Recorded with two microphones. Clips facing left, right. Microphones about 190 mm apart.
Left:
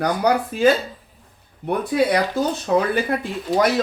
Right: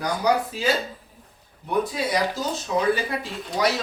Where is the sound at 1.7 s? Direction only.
60° left (ahead or behind).